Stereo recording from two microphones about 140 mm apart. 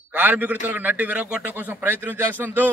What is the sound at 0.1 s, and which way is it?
A man's voice, 10° right (ahead or behind).